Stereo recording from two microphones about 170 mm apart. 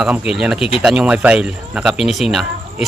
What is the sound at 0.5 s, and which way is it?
Speech, 35° left (ahead or behind).